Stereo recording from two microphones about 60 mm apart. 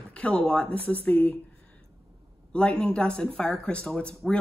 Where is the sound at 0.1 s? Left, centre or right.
Centre.